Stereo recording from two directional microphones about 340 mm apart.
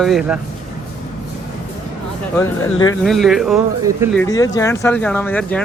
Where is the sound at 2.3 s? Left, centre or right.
Centre.